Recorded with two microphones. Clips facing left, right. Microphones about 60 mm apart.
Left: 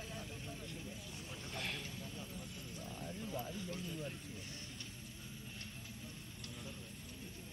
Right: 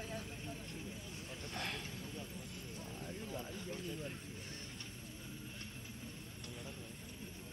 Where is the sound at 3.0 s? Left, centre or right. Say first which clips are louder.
Left 2 dB; centre.